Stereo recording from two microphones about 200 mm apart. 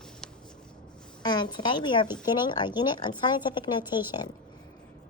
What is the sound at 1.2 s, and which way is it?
A woman's voice, 20° left (ahead or behind).